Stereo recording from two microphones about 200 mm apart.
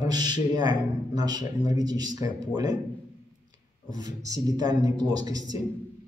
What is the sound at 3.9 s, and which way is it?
Speech, 20° right (ahead or behind).